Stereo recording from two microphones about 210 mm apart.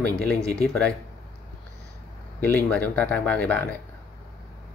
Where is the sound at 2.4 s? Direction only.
5° left (ahead or behind).